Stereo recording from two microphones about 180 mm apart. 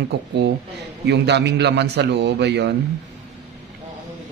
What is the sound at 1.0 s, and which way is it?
A man's voice, 70° right (ahead or behind).